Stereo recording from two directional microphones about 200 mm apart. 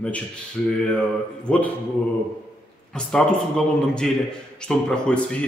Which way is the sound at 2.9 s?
5° left (ahead or behind).